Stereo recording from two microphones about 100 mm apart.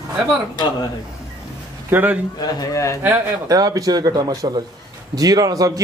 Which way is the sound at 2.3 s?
35° left (ahead or behind).